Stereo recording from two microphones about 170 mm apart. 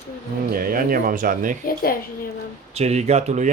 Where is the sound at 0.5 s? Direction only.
55° right (ahead or behind).